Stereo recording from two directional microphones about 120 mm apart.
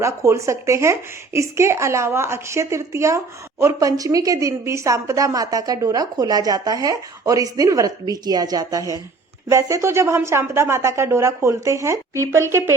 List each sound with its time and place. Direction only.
0.0 s a woman's voice: 25° right (ahead or behind)